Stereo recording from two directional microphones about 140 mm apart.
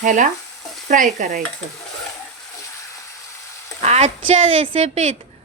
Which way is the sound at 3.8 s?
50° right (ahead or behind).